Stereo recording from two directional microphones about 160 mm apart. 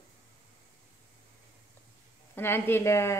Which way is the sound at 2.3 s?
15° left (ahead or behind).